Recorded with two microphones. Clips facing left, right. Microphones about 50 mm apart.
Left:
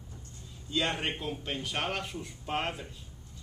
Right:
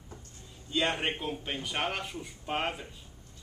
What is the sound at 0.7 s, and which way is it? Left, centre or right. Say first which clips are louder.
A man's voice: right 1 dB; centre.